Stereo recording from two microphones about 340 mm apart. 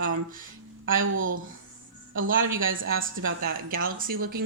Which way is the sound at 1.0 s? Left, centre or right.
Right.